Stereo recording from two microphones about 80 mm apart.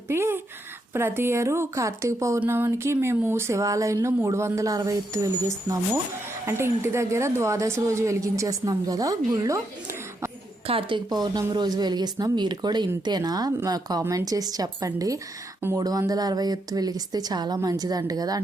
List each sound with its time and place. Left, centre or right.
0.1 s speech: right
6.4 s speech: right
10.8 s a woman's voice: right